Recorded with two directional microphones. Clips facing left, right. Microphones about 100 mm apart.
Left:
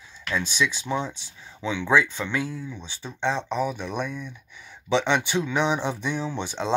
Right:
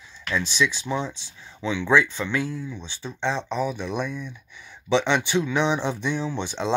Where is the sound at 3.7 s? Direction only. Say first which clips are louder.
Right 2 dB; 50° left (ahead or behind).